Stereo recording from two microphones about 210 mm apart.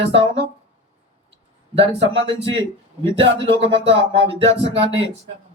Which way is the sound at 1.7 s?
30° right (ahead or behind).